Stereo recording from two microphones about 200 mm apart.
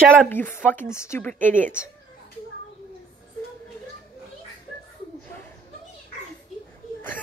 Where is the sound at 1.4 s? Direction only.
40° right (ahead or behind).